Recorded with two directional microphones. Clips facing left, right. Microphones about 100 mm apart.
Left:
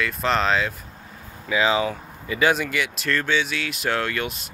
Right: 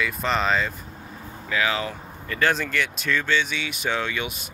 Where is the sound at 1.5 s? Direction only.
20° left (ahead or behind).